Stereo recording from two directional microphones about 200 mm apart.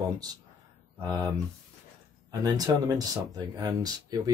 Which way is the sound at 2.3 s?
20° right (ahead or behind).